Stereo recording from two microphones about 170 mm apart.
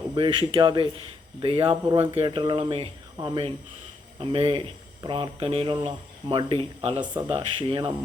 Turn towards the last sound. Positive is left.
turn(degrees=-30)  # may be behind; listen again after turning